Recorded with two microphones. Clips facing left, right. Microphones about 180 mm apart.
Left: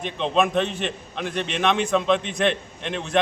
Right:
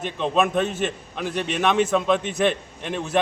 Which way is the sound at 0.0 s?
5° right (ahead or behind).